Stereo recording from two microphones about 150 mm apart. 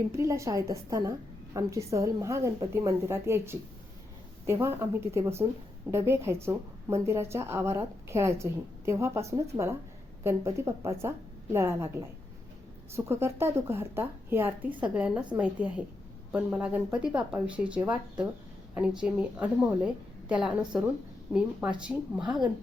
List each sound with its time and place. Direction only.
0.2 s a woman's voice: 20° right (ahead or behind)
13.1 s a woman's voice: 15° right (ahead or behind)